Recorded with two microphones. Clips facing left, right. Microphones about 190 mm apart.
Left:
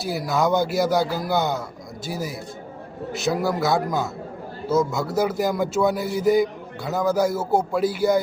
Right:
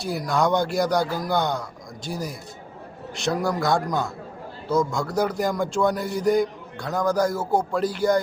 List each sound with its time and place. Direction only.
0.0 s a man's voice: 5° left (ahead or behind)